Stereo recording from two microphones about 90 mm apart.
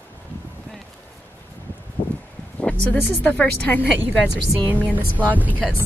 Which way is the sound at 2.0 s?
90° left.